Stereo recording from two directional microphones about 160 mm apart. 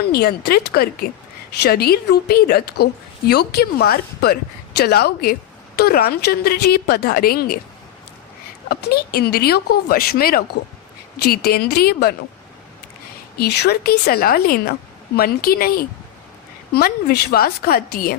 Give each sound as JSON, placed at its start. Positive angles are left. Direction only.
{"t": 0.1, "sound": "a woman's voice", "side_deg": 75}
{"t": 8.7, "sound": "a woman's voice", "side_deg": 80}
{"t": 13.4, "sound": "a woman's voice", "side_deg": 85}
{"t": 16.7, "sound": "a woman's voice", "side_deg": 80}